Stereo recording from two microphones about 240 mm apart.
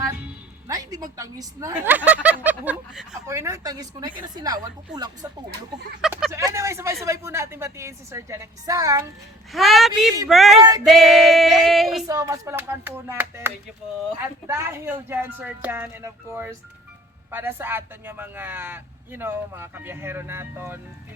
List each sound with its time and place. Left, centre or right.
0.7 s music: centre
1.1 s speech: centre
6.0 s a sound: centre
6.4 s speech: centre
9.5 s a sound: centre
12.0 s speech: centre